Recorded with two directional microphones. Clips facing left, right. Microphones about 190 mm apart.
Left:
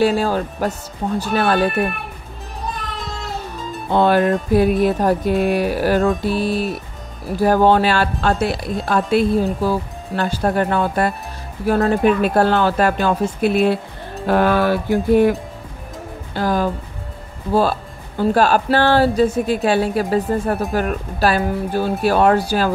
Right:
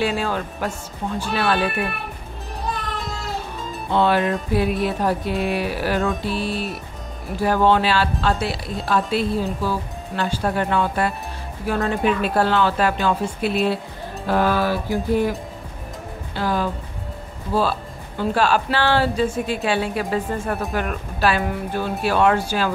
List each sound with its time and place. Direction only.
0.0 s speech: 40° left (ahead or behind)
1.2 s music: 45° left (ahead or behind)
3.9 s music: 45° left (ahead or behind); by 15.3 s 60° left (ahead or behind)
16.3 s music: 45° left (ahead or behind)
17.6 s speech: 45° left (ahead or behind)